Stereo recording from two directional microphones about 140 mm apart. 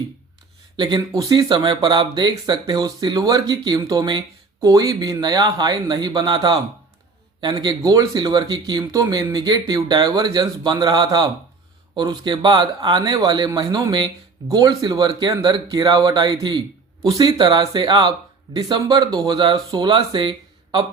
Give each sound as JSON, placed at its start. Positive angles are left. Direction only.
{"t": 0.8, "sound": "speech", "side_deg": -30}